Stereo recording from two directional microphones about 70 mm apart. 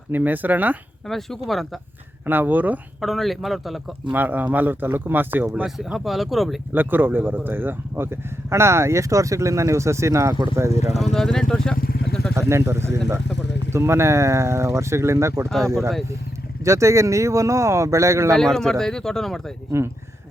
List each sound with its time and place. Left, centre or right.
0.1 s speech: right
1.0 s speech: centre
2.2 s speech: right
3.0 s speech: centre
4.1 s speech: right
5.6 s speech: centre
6.7 s speech: right
11.0 s speech: centre
12.3 s speech: right
15.4 s speech: centre
16.6 s speech: right
18.3 s speech: centre